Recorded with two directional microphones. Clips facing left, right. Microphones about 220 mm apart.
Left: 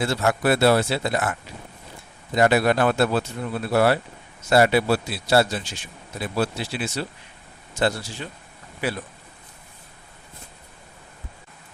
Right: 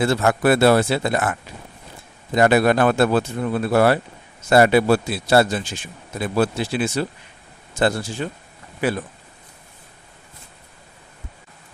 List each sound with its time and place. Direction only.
0.0 s speech: 50° right (ahead or behind)